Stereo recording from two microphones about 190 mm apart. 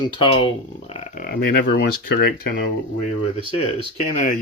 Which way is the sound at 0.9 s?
40° left (ahead or behind).